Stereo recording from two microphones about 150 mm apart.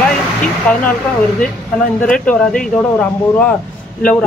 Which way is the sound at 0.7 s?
10° left (ahead or behind).